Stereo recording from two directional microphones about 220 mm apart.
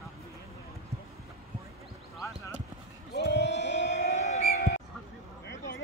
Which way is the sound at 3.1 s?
50° left (ahead or behind).